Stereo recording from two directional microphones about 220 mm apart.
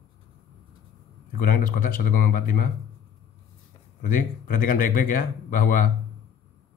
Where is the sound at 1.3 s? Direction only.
40° left (ahead or behind).